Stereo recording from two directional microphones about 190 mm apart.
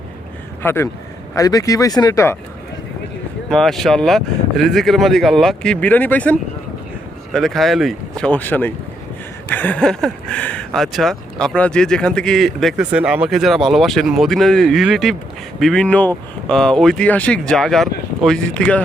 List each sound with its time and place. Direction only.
0.6 s speech: 10° left (ahead or behind)
3.5 s speech: centre (ahead or behind)